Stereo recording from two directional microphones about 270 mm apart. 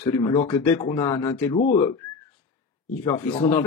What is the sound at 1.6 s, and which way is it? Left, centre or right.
Speech, left.